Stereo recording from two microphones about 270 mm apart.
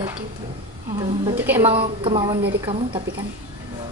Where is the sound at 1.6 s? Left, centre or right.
Right.